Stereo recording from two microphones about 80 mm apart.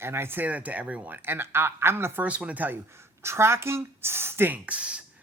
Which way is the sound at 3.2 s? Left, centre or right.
Right.